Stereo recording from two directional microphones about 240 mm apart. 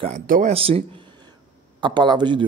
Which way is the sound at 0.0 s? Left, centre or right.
Right.